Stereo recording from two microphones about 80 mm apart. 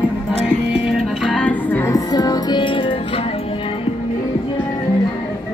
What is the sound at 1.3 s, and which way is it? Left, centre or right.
Music, centre.